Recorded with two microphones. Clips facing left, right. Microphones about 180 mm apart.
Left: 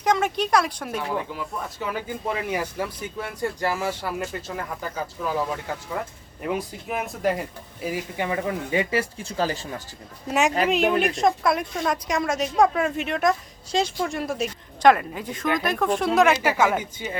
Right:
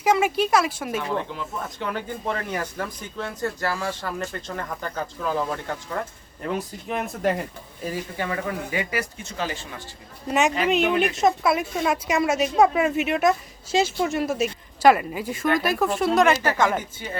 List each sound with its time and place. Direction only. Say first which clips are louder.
0.0 s a woman's voice: right 2 dB; 5° right (ahead or behind)
1.0 s speech: right 1 dB; 5° left (ahead or behind); by 9.8 s 35° left (ahead or behind)
10.2 s a woman's voice: even; centre (ahead or behind)